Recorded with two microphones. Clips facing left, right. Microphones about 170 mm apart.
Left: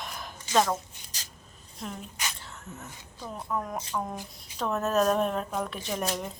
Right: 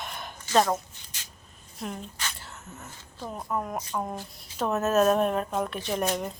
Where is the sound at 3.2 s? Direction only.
10° right (ahead or behind).